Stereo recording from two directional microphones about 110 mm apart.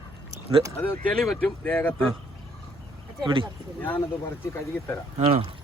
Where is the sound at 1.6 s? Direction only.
15° left (ahead or behind).